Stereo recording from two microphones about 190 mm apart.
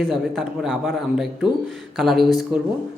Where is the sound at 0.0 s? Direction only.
Centre (ahead or behind).